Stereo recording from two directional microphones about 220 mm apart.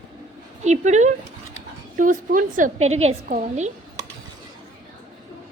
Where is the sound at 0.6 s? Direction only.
30° right (ahead or behind).